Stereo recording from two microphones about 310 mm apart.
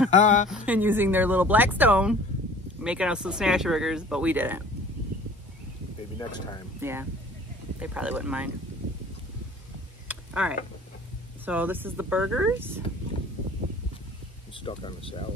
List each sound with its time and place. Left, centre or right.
0.1 s speech: left
0.7 s speech: centre
6.1 s speech: centre
6.8 s speech: centre
10.0 s a sound: centre
11.4 s speech: centre
14.6 s speech: centre